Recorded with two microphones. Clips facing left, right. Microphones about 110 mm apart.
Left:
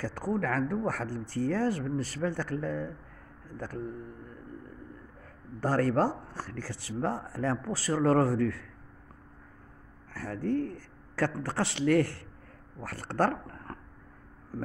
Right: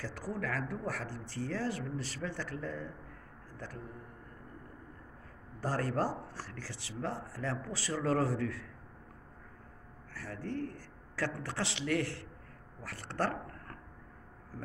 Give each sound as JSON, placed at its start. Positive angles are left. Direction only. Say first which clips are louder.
{"t": 0.0, "sound": "speech", "louder": "left 7 dB", "side_deg": 50}
{"t": 5.6, "sound": "speech", "louder": "left 7 dB", "side_deg": 60}
{"t": 10.1, "sound": "speech", "louder": "left 9 dB", "side_deg": 45}